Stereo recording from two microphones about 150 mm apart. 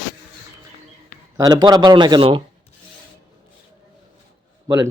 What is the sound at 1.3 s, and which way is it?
A man's voice, 25° right (ahead or behind).